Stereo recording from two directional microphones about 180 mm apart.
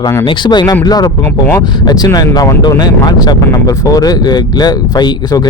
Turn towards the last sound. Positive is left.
turn(degrees=20)  # may be behind; listen again after turning